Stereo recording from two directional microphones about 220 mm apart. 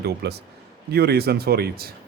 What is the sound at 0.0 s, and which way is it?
Speech, 50° right (ahead or behind).